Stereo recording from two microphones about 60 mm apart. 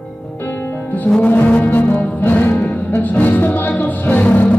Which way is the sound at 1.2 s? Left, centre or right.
Left.